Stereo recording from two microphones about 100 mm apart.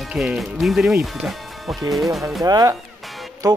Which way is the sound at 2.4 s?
35° right (ahead or behind).